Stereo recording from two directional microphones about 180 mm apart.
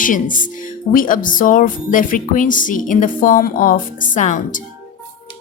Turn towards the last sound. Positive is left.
turn(degrees=45)  # may be behind; listen again after turning